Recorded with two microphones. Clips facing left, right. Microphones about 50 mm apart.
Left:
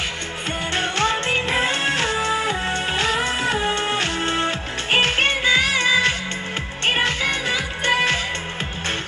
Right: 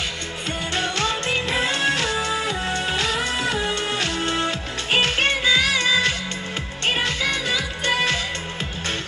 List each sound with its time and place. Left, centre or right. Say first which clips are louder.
0.7 s music: left 3 dB; left
6.9 s music of asia: left 2 dB; left